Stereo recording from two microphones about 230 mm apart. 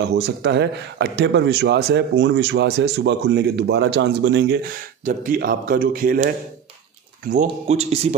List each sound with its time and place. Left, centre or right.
0.1 s a man's voice: right